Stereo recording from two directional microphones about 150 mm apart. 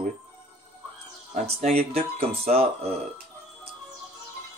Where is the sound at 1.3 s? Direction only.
50° right (ahead or behind).